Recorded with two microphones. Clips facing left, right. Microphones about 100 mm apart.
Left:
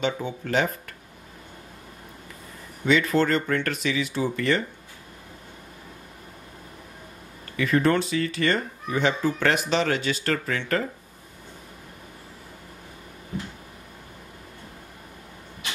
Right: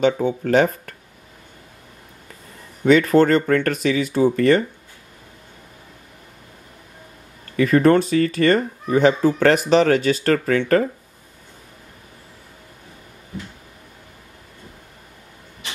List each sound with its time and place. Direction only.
0.0 s speech: 50° right (ahead or behind)
2.8 s speech: 45° right (ahead or behind)
7.5 s speech: 45° right (ahead or behind)